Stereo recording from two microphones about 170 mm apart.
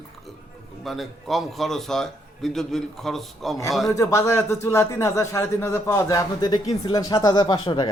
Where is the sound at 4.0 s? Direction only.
15° left (ahead or behind).